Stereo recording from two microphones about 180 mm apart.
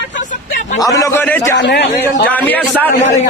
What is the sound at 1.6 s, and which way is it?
Speech, 70° left (ahead or behind).